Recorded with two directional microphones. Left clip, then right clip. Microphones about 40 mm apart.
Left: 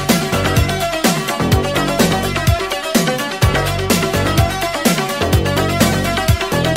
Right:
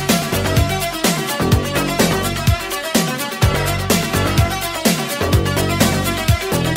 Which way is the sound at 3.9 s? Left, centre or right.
Right.